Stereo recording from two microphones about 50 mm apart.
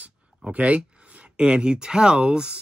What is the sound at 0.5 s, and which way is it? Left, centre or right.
Speech, right.